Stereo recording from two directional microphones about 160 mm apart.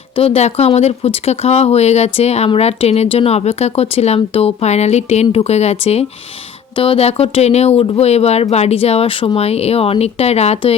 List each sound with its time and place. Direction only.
0.2 s speech: 40° left (ahead or behind)